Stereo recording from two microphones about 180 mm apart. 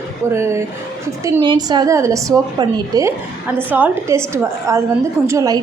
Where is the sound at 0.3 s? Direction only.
15° right (ahead or behind).